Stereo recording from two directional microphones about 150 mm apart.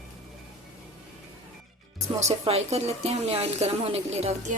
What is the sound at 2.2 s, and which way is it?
Speech, 45° right (ahead or behind).